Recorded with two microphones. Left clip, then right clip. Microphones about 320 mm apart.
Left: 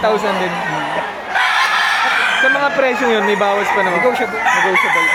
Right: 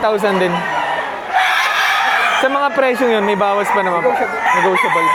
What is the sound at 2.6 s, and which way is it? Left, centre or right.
Speech, right.